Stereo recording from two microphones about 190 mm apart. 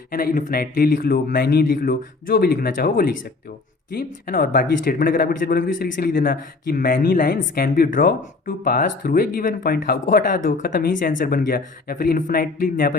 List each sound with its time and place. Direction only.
0.1 s speech: 50° left (ahead or behind)